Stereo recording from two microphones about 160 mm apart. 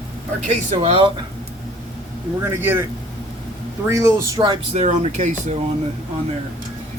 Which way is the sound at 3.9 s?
20° right (ahead or behind).